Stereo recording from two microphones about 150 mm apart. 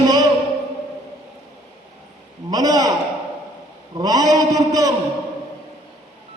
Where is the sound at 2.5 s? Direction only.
25° right (ahead or behind).